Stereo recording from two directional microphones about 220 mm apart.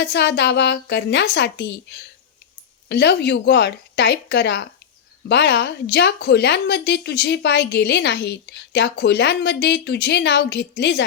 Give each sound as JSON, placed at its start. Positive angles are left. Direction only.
{"t": 0.0, "sound": "speech", "side_deg": 50}